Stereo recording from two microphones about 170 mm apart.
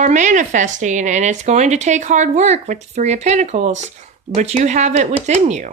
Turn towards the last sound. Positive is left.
turn(degrees=-45)  # may be behind; listen again after turning